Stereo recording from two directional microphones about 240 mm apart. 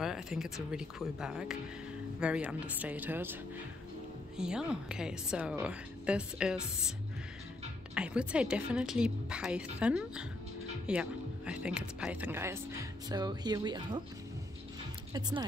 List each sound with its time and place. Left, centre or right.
0.0 s a woman's voice: centre
4.4 s a woman's voice: centre
7.9 s a woman's voice: centre
15.1 s speech: centre